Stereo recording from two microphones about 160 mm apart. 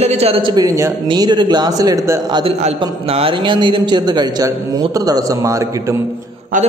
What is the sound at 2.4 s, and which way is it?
A man's voice, 40° right (ahead or behind).